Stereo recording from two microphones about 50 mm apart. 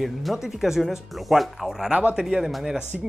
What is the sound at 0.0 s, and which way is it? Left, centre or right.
Speech, centre.